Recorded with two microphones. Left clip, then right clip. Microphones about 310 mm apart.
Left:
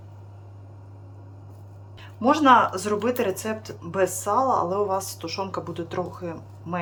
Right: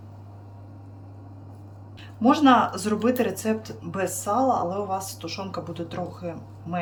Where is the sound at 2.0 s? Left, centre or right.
Centre.